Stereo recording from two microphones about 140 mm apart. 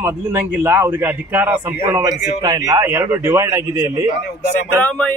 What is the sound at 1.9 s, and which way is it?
A man's voice, 25° right (ahead or behind).